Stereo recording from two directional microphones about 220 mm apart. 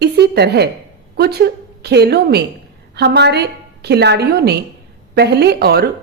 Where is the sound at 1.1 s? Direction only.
45° right (ahead or behind).